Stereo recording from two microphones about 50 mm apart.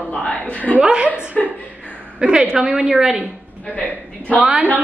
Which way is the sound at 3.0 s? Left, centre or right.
Centre.